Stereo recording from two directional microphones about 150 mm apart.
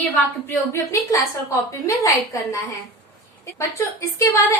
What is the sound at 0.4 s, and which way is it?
Speech, 20° left (ahead or behind).